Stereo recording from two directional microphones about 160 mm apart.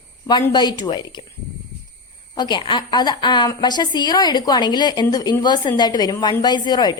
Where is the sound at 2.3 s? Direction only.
25° left (ahead or behind).